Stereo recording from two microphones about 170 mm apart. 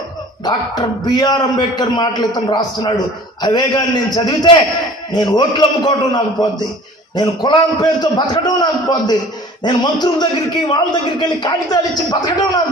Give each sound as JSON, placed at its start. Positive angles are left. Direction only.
{"t": 0.5, "sound": "a man's voice", "side_deg": 25}